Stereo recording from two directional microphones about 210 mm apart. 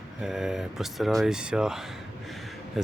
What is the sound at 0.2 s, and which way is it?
Speech, centre (ahead or behind).